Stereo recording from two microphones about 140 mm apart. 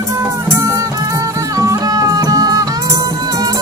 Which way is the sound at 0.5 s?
20° right (ahead or behind).